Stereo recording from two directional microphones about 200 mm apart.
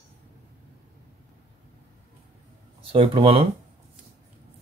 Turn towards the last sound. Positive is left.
turn(degrees=-25)  # may be behind; listen again after turning